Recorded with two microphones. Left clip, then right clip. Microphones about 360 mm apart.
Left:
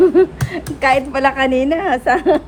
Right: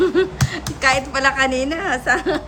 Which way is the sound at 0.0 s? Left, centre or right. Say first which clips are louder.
Left 6 dB; centre.